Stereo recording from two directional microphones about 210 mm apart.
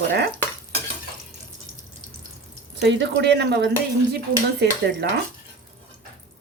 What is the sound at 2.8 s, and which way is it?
Speech, 55° right (ahead or behind).